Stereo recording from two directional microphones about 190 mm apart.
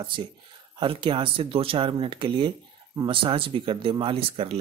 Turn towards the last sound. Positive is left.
turn(degrees=-30)  # may be behind; listen again after turning